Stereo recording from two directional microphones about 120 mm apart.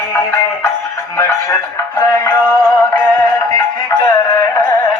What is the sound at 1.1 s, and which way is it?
Music, 25° left (ahead or behind).